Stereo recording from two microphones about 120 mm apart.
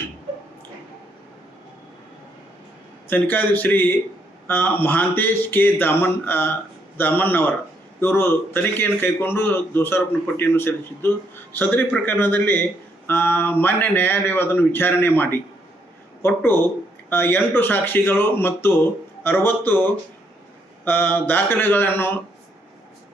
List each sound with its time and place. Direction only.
3.1 s a man's voice: 15° left (ahead or behind)
20.8 s speech: 15° left (ahead or behind)